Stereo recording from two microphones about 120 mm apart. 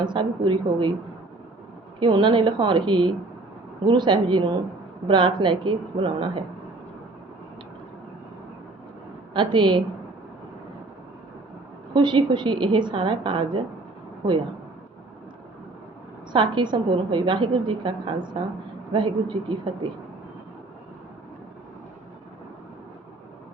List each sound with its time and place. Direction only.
0.0 s a woman's voice: 40° right (ahead or behind)
2.0 s a woman's voice: 40° right (ahead or behind)
9.3 s a woman's voice: 40° right (ahead or behind)
11.9 s a woman's voice: 40° right (ahead or behind)
16.3 s a woman's voice: 40° right (ahead or behind)